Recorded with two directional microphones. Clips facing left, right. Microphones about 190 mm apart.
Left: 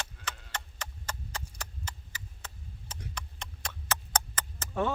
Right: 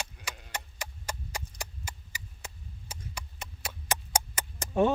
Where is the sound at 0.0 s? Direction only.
15° right (ahead or behind).